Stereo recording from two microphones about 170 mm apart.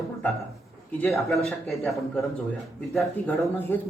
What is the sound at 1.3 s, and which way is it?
A man's voice, centre (ahead or behind).